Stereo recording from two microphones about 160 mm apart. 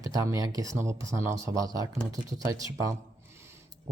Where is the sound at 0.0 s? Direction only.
20° right (ahead or behind).